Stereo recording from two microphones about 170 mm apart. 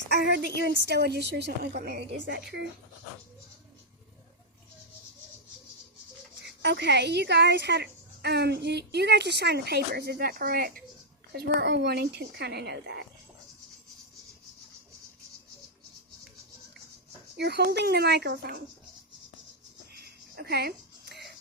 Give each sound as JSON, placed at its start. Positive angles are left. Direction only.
{"t": 0.1, "sound": "a woman's voice", "side_deg": -85}
{"t": 6.4, "sound": "speech", "side_deg": -90}
{"t": 11.3, "sound": "a woman's voice", "side_deg": -80}
{"t": 17.3, "sound": "a woman's voice", "side_deg": -75}
{"t": 20.0, "sound": "music", "side_deg": -70}